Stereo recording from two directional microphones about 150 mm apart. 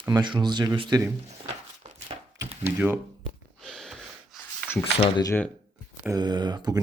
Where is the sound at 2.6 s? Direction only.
15° right (ahead or behind).